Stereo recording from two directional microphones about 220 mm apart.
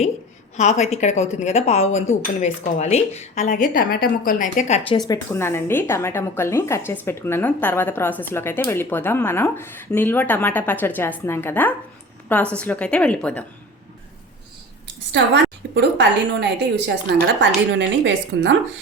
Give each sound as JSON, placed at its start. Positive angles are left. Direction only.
{"t": 0.5, "sound": "a woman's voice", "side_deg": 30}
{"t": 4.9, "sound": "a woman's voice", "side_deg": 15}
{"t": 15.1, "sound": "a woman's voice", "side_deg": -50}